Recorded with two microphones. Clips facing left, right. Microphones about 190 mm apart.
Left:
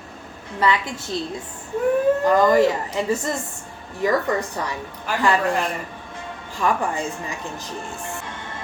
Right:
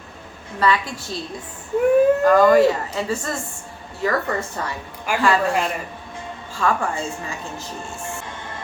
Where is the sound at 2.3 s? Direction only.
20° left (ahead or behind).